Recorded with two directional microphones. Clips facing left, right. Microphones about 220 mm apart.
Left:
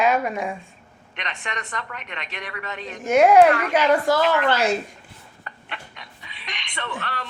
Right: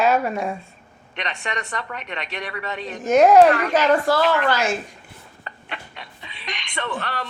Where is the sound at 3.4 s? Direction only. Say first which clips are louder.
Right 1 dB; 35° right (ahead or behind).